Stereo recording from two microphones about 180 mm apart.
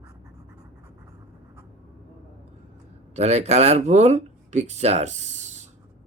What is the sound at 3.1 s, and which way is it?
Speech, 40° right (ahead or behind).